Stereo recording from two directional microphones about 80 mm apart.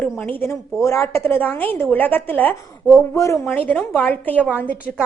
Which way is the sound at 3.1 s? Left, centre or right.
Left.